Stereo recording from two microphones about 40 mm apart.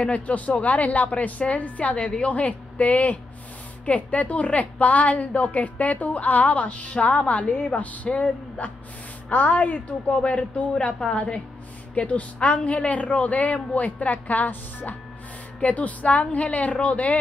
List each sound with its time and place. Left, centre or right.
0.0 s a woman's voice: left